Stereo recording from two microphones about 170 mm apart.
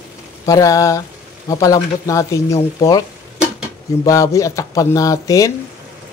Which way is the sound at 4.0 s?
20° left (ahead or behind).